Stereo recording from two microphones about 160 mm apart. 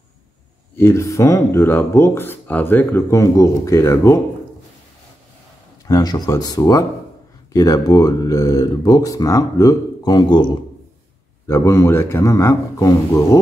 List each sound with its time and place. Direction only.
0.7 s speech: 15° left (ahead or behind)
5.9 s speech: 25° left (ahead or behind)